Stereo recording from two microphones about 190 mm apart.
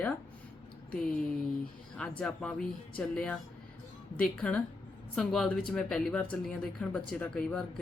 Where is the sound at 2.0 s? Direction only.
5° left (ahead or behind).